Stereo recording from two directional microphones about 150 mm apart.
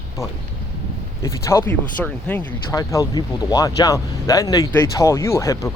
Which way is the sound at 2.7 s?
25° left (ahead or behind).